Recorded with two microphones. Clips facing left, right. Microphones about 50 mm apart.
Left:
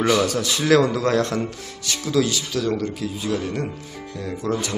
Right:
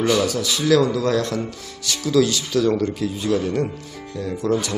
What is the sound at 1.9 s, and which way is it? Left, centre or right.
Speech, centre.